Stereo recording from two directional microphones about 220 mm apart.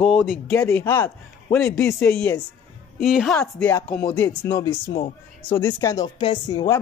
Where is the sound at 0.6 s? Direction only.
10° left (ahead or behind).